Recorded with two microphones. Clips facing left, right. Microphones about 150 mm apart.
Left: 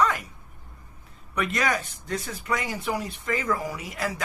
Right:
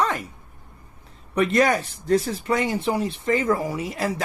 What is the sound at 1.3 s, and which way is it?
Speech, 30° right (ahead or behind).